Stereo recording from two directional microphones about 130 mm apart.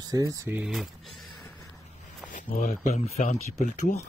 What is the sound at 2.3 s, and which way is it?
Speech, 85° left.